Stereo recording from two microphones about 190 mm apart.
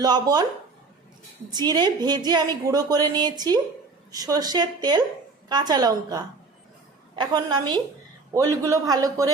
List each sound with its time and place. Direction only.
0.0 s a woman's voice: 20° right (ahead or behind)
1.5 s a woman's voice: 20° right (ahead or behind)